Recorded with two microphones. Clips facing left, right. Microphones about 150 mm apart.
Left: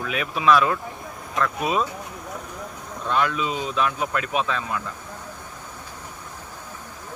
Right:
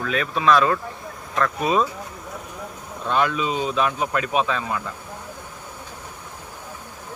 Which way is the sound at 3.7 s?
25° right (ahead or behind).